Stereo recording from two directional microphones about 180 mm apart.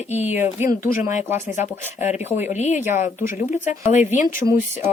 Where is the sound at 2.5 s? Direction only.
40° left (ahead or behind).